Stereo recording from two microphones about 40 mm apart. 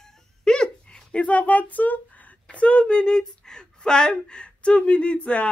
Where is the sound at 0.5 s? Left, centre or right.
Centre.